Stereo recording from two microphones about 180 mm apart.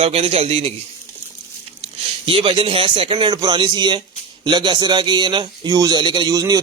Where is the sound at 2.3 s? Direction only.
30° right (ahead or behind).